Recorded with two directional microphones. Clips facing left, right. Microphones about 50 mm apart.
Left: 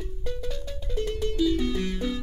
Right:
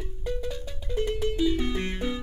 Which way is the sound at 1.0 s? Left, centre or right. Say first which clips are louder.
Even; centre.